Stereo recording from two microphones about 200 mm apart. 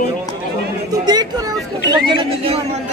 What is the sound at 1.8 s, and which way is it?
Speech, 25° right (ahead or behind).